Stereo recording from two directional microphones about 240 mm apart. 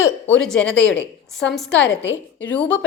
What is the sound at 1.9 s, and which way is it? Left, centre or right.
Speech, left.